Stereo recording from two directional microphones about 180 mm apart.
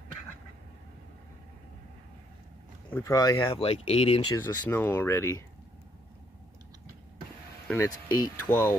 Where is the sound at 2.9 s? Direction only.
20° left (ahead or behind).